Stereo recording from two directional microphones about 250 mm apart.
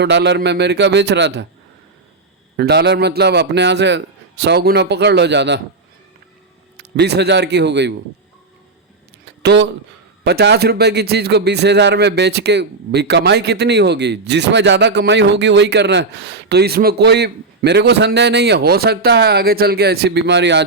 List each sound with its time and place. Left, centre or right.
0.0 s a man's voice: right
2.6 s a man's voice: right
6.7 s a man's voice: right
9.2 s a sound: right
10.2 s a man's voice: right